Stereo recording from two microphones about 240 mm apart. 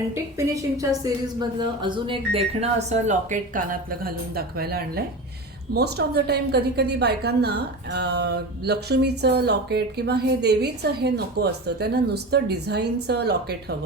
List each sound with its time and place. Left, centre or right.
0.1 s a woman's voice: centre; by 13.7 s right